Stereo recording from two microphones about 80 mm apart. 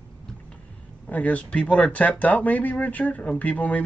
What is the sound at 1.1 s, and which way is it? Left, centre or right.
Speech, centre.